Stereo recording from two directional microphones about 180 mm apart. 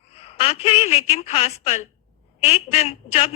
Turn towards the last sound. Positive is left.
turn(degrees=35)  # may be behind; listen again after turning